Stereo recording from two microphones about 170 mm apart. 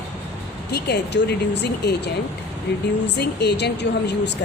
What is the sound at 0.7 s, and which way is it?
Speech, 75° left (ahead or behind).